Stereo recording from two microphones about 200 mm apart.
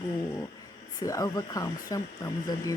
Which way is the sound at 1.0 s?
15° left (ahead or behind).